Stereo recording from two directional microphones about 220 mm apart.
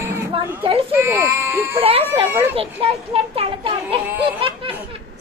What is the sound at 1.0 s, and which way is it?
Speech, 10° right (ahead or behind).